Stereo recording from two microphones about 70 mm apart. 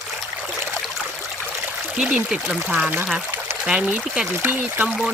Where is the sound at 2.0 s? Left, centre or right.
Centre.